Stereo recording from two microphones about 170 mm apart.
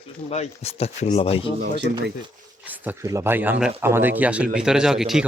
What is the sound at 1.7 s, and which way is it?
Speech, 80° right.